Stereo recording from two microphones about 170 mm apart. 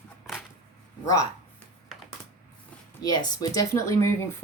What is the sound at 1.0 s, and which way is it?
Speech, 20° left (ahead or behind).